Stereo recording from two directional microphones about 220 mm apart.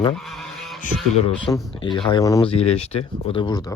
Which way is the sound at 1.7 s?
20° left (ahead or behind).